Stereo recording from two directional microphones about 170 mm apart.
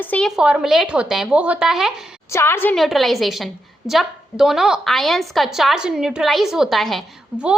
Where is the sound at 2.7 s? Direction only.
Centre (ahead or behind).